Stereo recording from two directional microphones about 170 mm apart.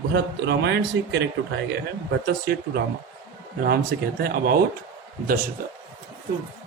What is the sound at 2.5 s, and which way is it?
Speech, 65° right (ahead or behind).